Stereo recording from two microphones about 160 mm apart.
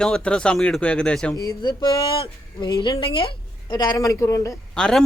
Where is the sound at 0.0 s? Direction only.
5° left (ahead or behind).